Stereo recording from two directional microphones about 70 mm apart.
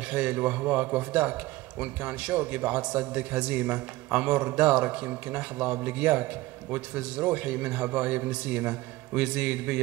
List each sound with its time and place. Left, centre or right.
0.0 s a man's voice: centre